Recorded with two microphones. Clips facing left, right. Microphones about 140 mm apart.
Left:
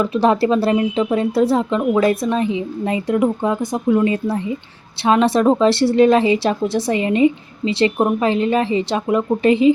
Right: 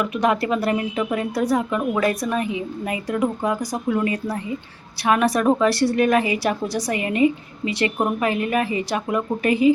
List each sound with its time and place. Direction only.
0.0 s a woman's voice: 30° left (ahead or behind)